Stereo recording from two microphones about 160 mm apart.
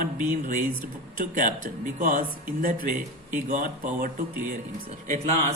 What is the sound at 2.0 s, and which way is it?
Speech, 60° right (ahead or behind).